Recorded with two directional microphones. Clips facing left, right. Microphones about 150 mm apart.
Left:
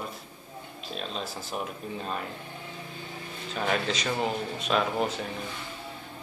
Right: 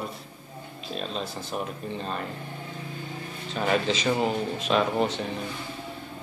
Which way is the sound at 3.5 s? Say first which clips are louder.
Right 3 dB; centre (ahead or behind).